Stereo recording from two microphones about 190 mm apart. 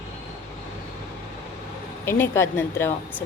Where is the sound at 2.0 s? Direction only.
10° left (ahead or behind).